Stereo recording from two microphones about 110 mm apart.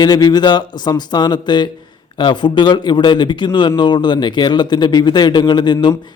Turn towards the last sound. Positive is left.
turn(degrees=40)  # may be behind; listen again after turning